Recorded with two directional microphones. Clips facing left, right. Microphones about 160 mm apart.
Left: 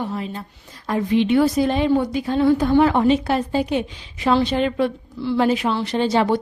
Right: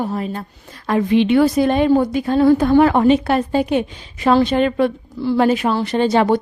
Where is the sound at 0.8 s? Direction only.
75° right (ahead or behind).